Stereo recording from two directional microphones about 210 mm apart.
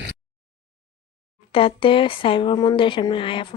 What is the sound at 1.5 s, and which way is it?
Speech, 25° left (ahead or behind).